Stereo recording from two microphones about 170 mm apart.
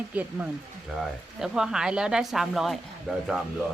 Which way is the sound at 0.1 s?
10° right (ahead or behind).